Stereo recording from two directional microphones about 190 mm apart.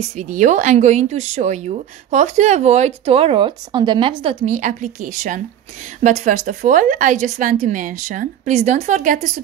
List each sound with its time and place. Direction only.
0.2 s a woman's voice: 40° right (ahead or behind)